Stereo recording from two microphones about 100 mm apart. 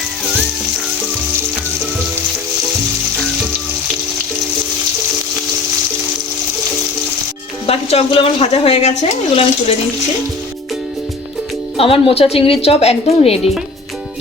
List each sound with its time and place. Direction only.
7.7 s a woman's voice: 90° left
11.8 s a woman's voice: 70° left (ahead or behind)